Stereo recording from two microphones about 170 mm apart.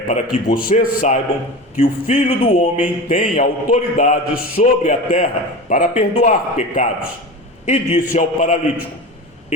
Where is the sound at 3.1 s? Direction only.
45° left (ahead or behind).